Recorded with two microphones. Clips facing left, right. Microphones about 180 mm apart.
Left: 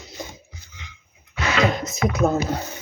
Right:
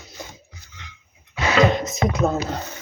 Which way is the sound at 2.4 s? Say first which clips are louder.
Left 2 dB; 10° left (ahead or behind).